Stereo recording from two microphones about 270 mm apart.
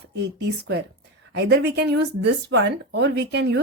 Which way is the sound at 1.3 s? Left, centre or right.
Right.